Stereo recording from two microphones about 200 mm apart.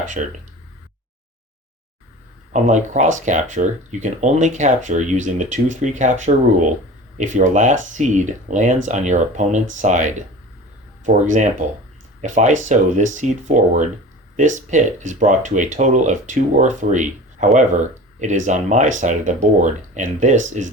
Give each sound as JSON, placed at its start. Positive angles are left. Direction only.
{"t": 0.2, "sound": "speech", "side_deg": -35}
{"t": 2.5, "sound": "speech", "side_deg": -35}